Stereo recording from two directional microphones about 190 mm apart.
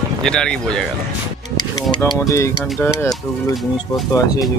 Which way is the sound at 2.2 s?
15° left (ahead or behind).